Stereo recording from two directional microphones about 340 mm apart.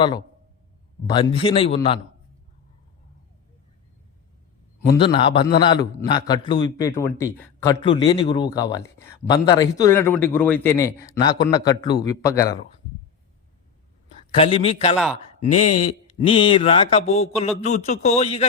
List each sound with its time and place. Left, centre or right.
1.0 s a man's voice: centre
4.9 s a man's voice: centre
14.3 s a man's voice: centre